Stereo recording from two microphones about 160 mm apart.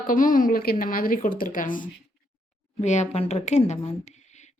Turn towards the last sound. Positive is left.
turn(degrees=45)  # may be behind; listen again after turning